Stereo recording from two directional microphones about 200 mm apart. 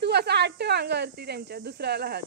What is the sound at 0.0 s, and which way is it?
Speech, 55° right (ahead or behind).